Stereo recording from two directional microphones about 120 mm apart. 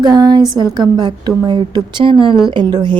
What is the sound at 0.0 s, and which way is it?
A woman's voice, 35° right (ahead or behind).